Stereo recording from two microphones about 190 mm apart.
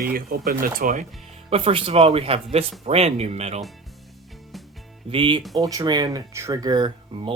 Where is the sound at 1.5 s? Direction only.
30° right (ahead or behind).